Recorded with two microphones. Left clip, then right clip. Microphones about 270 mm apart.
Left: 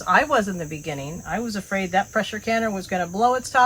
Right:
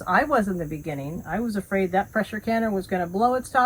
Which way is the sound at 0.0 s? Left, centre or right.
Centre.